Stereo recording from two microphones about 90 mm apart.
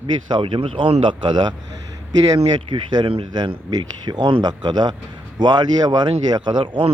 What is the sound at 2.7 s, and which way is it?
A man's voice, 55° right (ahead or behind).